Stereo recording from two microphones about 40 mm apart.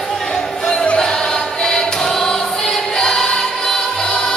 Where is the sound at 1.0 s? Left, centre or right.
Centre.